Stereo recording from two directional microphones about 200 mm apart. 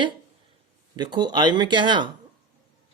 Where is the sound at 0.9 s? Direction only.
20° right (ahead or behind).